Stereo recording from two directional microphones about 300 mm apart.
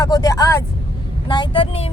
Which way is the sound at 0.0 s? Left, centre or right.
Centre.